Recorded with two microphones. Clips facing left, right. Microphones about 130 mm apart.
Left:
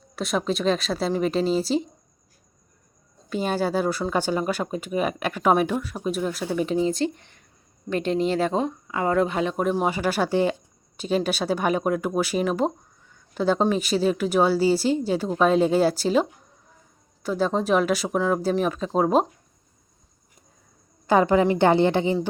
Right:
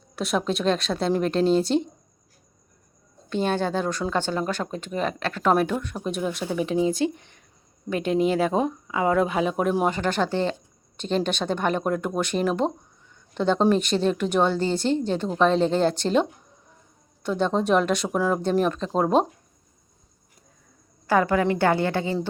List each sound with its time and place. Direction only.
0.2 s a woman's voice: centre (ahead or behind)
3.2 s a woman's voice: 5° left (ahead or behind)
17.2 s a woman's voice: centre (ahead or behind)
21.1 s a woman's voice: 20° left (ahead or behind)